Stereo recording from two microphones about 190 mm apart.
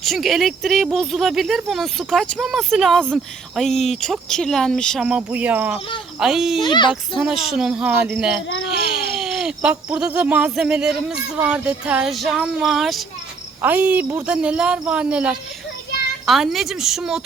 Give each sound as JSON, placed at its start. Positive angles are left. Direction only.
{"t": 0.0, "sound": "speech", "side_deg": 0}
{"t": 6.6, "sound": "a child's voice", "side_deg": 25}
{"t": 7.5, "sound": "speech", "side_deg": -5}
{"t": 8.4, "sound": "speech", "side_deg": 80}
{"t": 8.9, "sound": "a sound", "side_deg": 0}
{"t": 9.6, "sound": "speech", "side_deg": -5}